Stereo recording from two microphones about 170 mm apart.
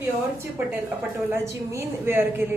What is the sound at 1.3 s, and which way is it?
A woman's voice, 15° right (ahead or behind).